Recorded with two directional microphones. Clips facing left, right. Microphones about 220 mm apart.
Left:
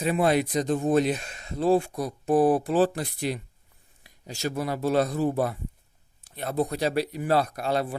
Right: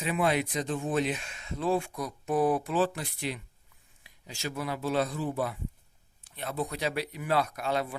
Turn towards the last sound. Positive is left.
turn(degrees=35)  # may be behind; listen again after turning